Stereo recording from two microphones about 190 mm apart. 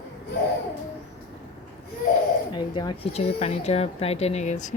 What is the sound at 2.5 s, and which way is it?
Speech, 25° left (ahead or behind).